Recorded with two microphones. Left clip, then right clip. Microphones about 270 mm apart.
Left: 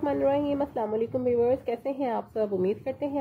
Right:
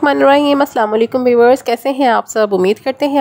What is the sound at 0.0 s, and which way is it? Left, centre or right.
Speech, right.